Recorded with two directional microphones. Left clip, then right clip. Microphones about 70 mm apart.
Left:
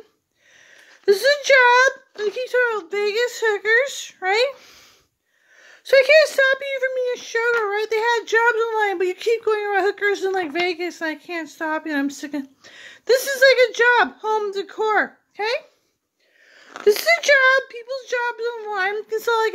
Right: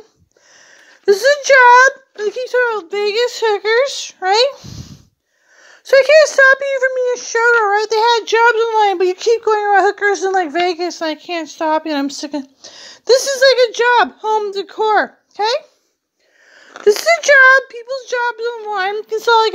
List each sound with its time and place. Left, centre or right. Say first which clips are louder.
0.6 s speech: right 3 dB; centre
2.6 s speech: right 4 dB; right
3.9 s speech: right 6 dB; right
4.5 s a sound: right 7 dB; centre
5.6 s speech: right 4 dB; centre
8.0 s speech: right 6 dB; right
8.9 s speech: right 7 dB; right
9.4 s speech: right 8 dB; centre
11.0 s speech: right 6 dB; right
12.1 s speech: right 6 dB; right
15.3 s a child's voice: right 7 dB; right
16.5 s speech: right 4 dB; right
18.2 s a child's voice: right 5 dB; right
19.0 s speech: right 11 dB; right